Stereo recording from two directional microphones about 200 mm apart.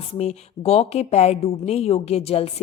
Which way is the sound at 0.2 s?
30° left (ahead or behind).